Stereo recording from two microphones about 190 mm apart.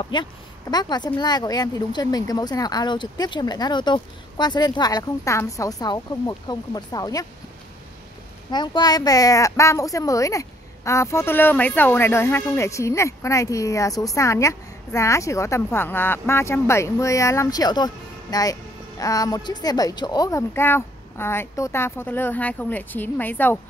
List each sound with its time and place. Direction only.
0.0 s speech: 25° left (ahead or behind)
8.5 s speech: 20° left (ahead or behind)